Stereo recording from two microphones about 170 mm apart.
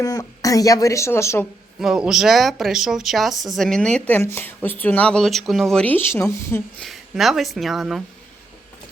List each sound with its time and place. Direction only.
0.0 s speech: 20° left (ahead or behind)
1.8 s speech: centre (ahead or behind); by 6.8 s 15° left (ahead or behind)
6.8 s speech: centre (ahead or behind)